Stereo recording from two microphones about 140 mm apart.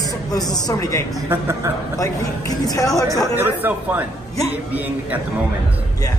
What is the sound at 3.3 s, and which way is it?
Speech, 15° right (ahead or behind).